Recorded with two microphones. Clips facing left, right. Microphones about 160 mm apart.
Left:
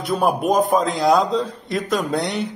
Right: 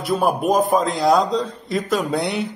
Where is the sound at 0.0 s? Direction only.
Centre (ahead or behind).